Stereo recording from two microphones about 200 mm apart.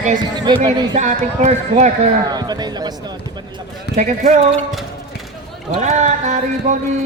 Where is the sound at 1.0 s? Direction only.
40° right (ahead or behind).